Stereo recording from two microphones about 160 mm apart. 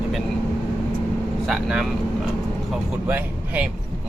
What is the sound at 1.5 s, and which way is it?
Speech, centre (ahead or behind).